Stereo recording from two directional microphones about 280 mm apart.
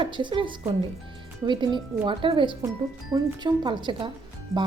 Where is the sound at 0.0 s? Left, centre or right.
Centre.